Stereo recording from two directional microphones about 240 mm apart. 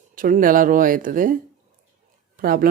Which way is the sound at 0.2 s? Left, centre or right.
Right.